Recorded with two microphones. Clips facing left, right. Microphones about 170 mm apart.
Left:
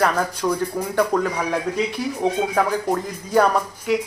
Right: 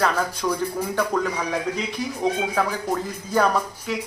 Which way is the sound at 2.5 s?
10° left (ahead or behind).